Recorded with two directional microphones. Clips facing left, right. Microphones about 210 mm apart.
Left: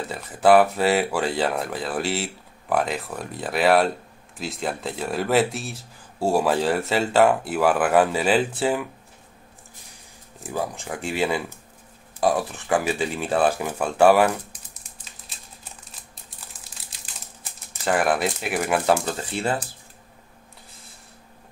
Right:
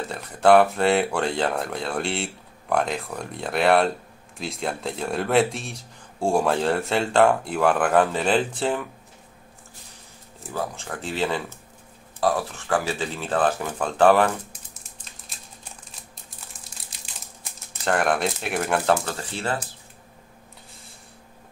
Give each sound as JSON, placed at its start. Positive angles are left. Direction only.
{"t": 0.1, "sound": "speech", "side_deg": 5}
{"t": 10.5, "sound": "speech", "side_deg": 15}
{"t": 17.0, "sound": "crumpling", "side_deg": 5}
{"t": 19.0, "sound": "speech", "side_deg": 15}